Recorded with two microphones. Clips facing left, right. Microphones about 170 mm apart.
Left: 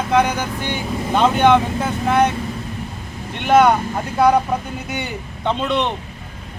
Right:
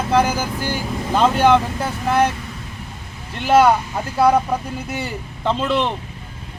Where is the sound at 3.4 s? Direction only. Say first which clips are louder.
Even; 5° right (ahead or behind).